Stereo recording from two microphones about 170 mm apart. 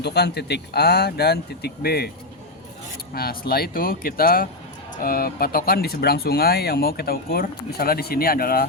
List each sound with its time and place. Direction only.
0.0 s speech: 75° left (ahead or behind)
3.2 s speech: 65° left (ahead or behind)